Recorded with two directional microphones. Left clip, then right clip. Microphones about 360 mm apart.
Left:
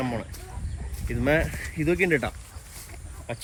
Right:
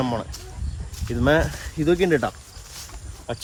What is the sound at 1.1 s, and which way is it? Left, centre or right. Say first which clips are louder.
Speech: right 4 dB; right.